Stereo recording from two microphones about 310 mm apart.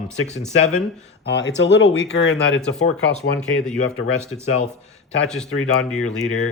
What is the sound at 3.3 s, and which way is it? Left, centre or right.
Speech, centre.